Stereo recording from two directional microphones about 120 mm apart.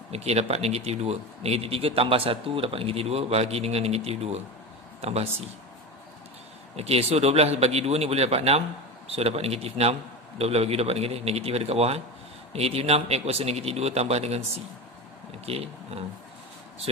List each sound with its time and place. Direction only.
0.1 s a man's voice: 60° right (ahead or behind)
6.8 s a man's voice: 55° right (ahead or behind)
15.4 s speech: 60° right (ahead or behind)